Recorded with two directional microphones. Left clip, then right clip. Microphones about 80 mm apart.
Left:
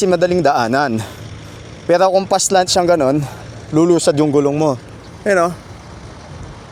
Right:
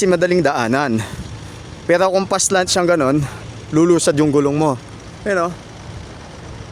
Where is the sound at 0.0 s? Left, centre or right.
Centre.